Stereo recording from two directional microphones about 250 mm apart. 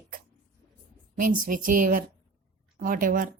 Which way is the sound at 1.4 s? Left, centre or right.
Right.